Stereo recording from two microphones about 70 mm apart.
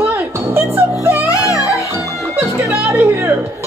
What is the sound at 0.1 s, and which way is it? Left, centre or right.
Music, right.